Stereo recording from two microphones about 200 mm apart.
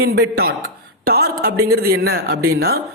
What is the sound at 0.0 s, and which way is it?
Speech, 50° right (ahead or behind).